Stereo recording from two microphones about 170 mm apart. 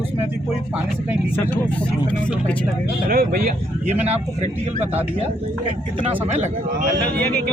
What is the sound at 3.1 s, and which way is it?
Speech, 60° right (ahead or behind).